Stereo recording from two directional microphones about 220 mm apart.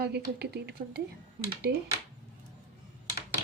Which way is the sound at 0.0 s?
50° right (ahead or behind).